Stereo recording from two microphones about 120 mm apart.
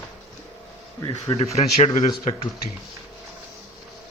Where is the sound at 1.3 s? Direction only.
60° left (ahead or behind).